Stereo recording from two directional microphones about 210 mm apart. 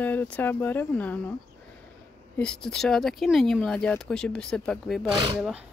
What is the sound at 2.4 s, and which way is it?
A woman's voice, 5° left (ahead or behind).